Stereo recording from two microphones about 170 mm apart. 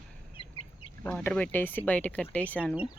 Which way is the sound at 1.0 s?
10° left (ahead or behind).